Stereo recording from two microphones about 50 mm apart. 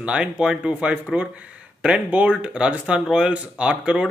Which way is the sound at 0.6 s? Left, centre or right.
Right.